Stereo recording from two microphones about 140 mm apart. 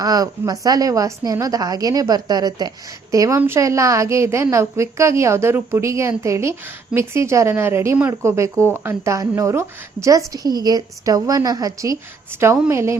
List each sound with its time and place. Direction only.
0.0 s a woman's voice: 25° right (ahead or behind)